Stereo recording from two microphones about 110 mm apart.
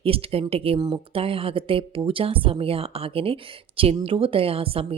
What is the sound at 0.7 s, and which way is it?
Speech, 40° right (ahead or behind).